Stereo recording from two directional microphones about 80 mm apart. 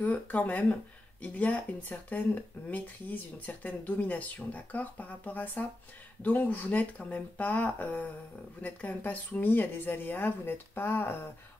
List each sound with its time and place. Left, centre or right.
0.0 s speech: centre